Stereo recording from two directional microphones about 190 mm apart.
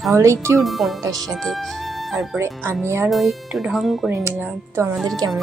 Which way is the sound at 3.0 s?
Centre (ahead or behind).